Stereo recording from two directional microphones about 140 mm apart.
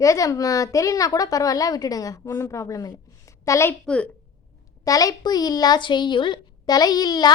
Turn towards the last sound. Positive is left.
turn(degrees=30)  # may be behind; listen again after turning